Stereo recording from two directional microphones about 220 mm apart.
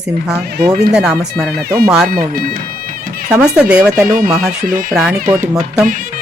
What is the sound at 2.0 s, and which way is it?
Bagpipes, 40° right (ahead or behind).